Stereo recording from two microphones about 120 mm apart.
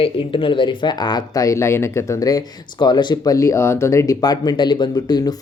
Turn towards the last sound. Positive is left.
turn(degrees=35)  # may be behind; listen again after turning